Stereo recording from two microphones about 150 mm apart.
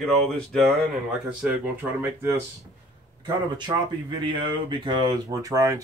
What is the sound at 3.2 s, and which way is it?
Speech, 30° right (ahead or behind).